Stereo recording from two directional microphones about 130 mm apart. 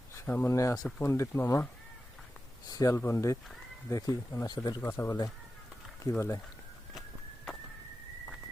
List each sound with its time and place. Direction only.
0.2 s speech: 15° left (ahead or behind)
2.6 s speech: 25° left (ahead or behind)
4.8 s speech: 20° left (ahead or behind)